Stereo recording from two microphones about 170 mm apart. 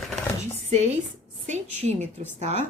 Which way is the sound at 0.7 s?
40° right (ahead or behind).